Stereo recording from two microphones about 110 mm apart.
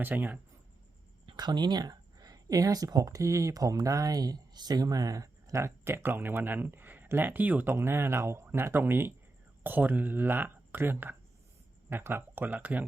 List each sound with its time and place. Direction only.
0.0 s speech: 15° right (ahead or behind)
1.3 s speech: 40° right (ahead or behind); by 12.8 s 15° right (ahead or behind)